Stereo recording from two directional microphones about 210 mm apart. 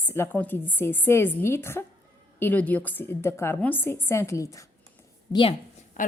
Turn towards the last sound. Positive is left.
turn(degrees=35)  # may be behind; listen again after turning